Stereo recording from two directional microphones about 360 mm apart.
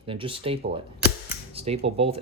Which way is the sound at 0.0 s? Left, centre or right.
Centre.